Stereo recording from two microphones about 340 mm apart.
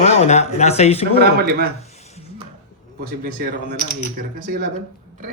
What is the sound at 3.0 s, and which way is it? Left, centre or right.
Speech, right.